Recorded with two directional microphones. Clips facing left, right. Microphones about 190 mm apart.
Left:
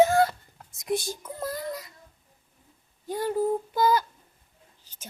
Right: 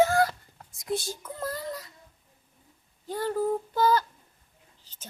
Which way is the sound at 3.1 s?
15° left (ahead or behind).